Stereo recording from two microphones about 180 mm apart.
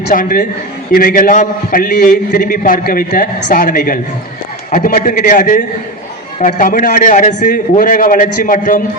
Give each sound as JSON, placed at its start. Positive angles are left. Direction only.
{"t": 0.1, "sound": "a man's voice", "side_deg": 50}